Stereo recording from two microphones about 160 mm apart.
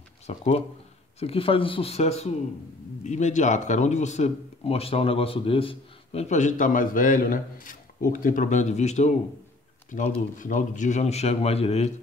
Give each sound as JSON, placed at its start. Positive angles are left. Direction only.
{"t": 0.3, "sound": "speech", "side_deg": 40}